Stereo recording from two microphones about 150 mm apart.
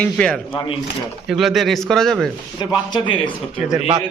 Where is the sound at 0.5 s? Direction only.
35° left (ahead or behind).